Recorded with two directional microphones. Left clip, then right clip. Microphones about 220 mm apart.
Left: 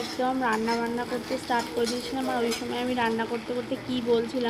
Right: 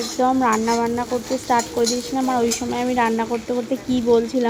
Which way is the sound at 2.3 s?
25° right (ahead or behind).